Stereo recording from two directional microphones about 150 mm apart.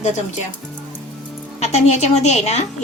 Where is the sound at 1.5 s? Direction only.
45° left (ahead or behind).